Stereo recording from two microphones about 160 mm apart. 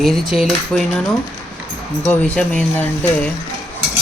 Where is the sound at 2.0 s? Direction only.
10° left (ahead or behind).